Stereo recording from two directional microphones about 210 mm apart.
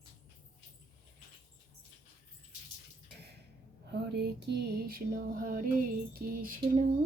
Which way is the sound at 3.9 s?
50° right (ahead or behind).